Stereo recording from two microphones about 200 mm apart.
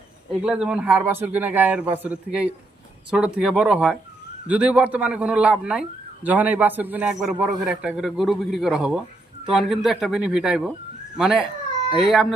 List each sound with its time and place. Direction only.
0.4 s a man's voice: 5° right (ahead or behind)